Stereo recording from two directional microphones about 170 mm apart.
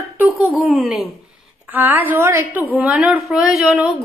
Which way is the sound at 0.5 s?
Centre (ahead or behind).